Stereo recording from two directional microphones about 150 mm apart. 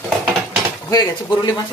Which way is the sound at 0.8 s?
25° left (ahead or behind).